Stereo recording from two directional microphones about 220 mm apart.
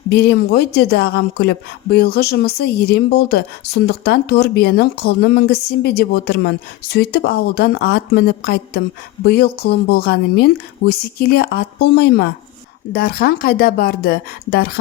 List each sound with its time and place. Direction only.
0.1 s speech: 45° left (ahead or behind)